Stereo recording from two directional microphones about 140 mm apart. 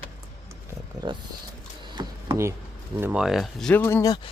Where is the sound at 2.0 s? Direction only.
30° right (ahead or behind).